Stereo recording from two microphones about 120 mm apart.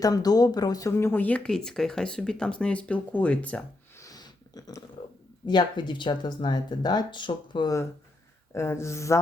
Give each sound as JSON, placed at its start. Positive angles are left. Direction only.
{"t": 0.0, "sound": "speech", "side_deg": 30}
{"t": 4.0, "sound": "a sound", "side_deg": 30}
{"t": 5.5, "sound": "speech", "side_deg": 40}
{"t": 8.5, "sound": "speech", "side_deg": 20}